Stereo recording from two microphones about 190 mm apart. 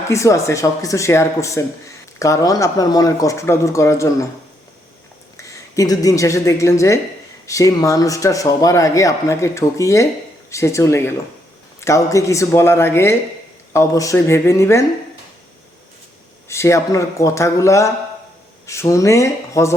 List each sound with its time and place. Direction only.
0.1 s a man's voice: 15° left (ahead or behind)
5.4 s a woman's voice: 20° left (ahead or behind)
16.5 s a man's voice: 15° left (ahead or behind)